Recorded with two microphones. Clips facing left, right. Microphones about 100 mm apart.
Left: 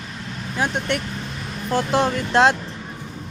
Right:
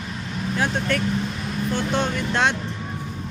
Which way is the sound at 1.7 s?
35° left (ahead or behind).